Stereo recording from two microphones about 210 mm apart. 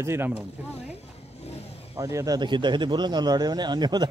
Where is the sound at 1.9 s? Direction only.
15° right (ahead or behind).